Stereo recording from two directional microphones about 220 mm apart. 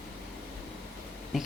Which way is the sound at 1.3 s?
Centre (ahead or behind).